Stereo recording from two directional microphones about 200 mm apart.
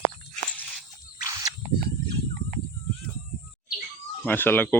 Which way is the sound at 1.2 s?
15° right (ahead or behind).